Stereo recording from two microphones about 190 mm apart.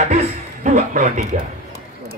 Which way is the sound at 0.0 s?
40° right (ahead or behind).